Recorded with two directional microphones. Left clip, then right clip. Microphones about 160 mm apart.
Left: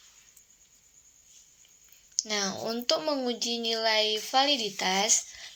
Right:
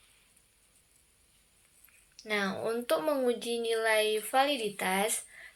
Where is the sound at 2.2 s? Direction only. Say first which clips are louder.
Right 1 dB; 50° left (ahead or behind); by 5.1 s 30° left (ahead or behind).